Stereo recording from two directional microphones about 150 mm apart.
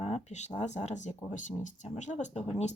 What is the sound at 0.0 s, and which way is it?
Speech, 45° left (ahead or behind).